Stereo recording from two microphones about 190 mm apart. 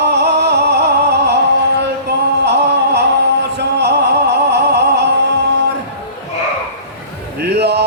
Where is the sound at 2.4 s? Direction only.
60° right (ahead or behind).